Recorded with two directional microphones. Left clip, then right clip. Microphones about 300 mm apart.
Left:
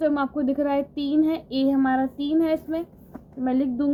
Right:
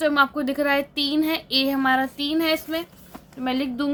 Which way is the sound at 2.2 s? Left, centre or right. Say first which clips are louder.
Even; centre.